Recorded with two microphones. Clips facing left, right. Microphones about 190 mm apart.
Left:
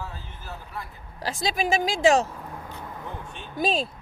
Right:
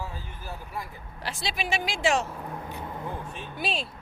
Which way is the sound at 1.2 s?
40° left (ahead or behind).